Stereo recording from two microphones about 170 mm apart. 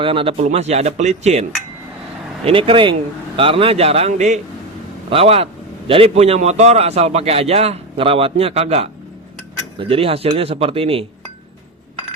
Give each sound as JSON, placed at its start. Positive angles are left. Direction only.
{"t": 0.0, "sound": "a man's voice", "side_deg": -30}